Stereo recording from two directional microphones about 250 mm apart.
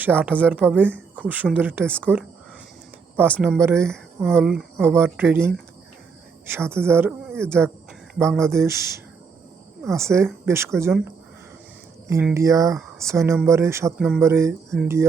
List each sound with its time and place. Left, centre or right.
0.0 s speech: centre
3.4 s speech: centre
3.8 s speech: centre
9.9 s speech: centre